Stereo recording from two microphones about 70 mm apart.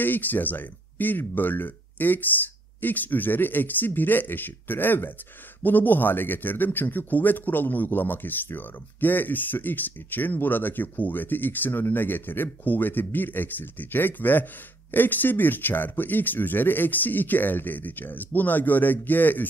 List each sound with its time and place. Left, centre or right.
0.0 s a man's voice: left